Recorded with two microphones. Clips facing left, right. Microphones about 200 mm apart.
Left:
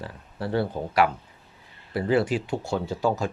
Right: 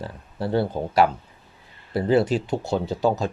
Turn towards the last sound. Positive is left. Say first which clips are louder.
# right 3 dB
turn(degrees=-20)  # may be behind; listen again after turning